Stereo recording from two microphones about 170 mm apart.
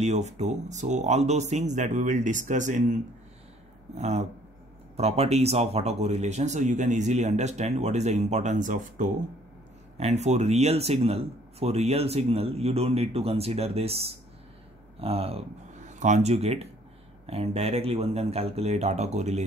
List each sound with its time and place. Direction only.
0.0 s speech: 40° right (ahead or behind)